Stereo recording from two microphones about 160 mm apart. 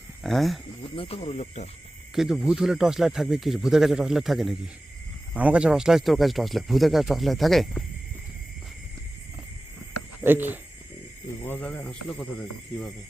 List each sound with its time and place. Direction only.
0.2 s speech: centre (ahead or behind)
0.9 s speech: 35° left (ahead or behind)
2.1 s speech: 5° right (ahead or behind)
10.2 s speech: 10° right (ahead or behind)
11.4 s speech: 10° left (ahead or behind)